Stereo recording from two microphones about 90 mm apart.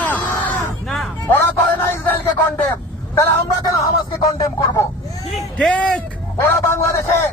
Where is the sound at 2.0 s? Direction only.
20° left (ahead or behind).